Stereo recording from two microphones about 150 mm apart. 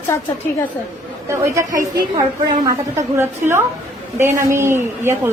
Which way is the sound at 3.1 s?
15° right (ahead or behind).